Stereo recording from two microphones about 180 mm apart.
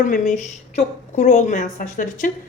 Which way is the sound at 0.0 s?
45° left (ahead or behind).